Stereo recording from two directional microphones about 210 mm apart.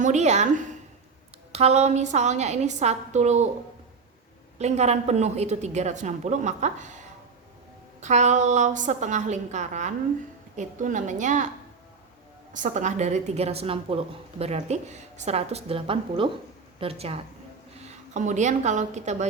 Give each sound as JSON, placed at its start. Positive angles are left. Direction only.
{"t": 0.0, "sound": "a woman's voice", "side_deg": -35}
{"t": 4.5, "sound": "a woman's voice", "side_deg": -30}
{"t": 8.0, "sound": "a woman's voice", "side_deg": -35}
{"t": 12.5, "sound": "a woman's voice", "side_deg": -35}